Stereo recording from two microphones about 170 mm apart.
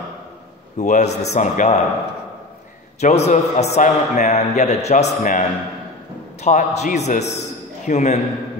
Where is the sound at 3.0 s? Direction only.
40° left (ahead or behind).